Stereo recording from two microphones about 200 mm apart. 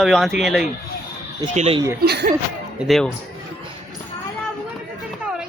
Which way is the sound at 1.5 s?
30° right (ahead or behind).